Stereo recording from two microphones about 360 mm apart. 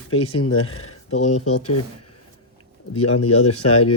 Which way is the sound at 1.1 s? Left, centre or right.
Centre.